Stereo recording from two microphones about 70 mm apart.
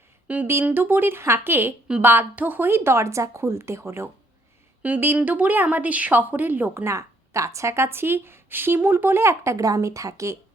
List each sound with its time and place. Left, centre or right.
0.3 s a woman's voice: right
4.8 s a woman's voice: right
6.8 s speech: right